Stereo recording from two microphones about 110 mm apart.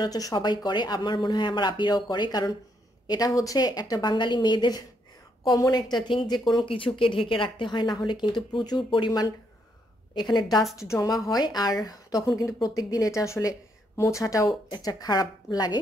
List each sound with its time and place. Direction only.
0.0 s speech: 35° left (ahead or behind)
10.8 s speech: 30° left (ahead or behind)